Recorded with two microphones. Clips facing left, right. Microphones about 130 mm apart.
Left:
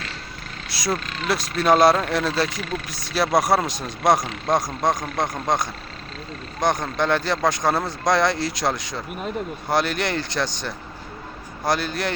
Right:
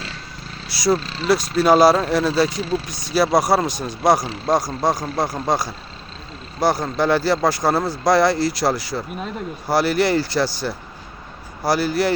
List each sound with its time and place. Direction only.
0.7 s speech: centre (ahead or behind)
0.9 s speech: 30° right (ahead or behind)
1.3 s speech: centre (ahead or behind)
2.6 s speech: 30° right (ahead or behind)
2.8 s speech: centre (ahead or behind)